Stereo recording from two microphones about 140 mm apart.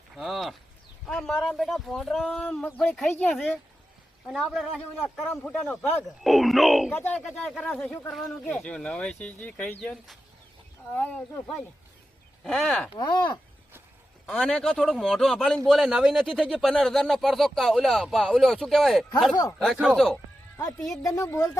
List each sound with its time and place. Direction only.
0.2 s a sound: centre (ahead or behind)
1.0 s a man's voice: 5° left (ahead or behind)
6.2 s a man's voice: centre (ahead or behind)
6.9 s speech: 15° left (ahead or behind)
7.3 s a man's voice: 5° left (ahead or behind)
10.9 s speech: 10° left (ahead or behind)
13.0 s speech: 30° left (ahead or behind)
14.3 s a man's voice: 10° left (ahead or behind)
21.1 s speech: 25° left (ahead or behind)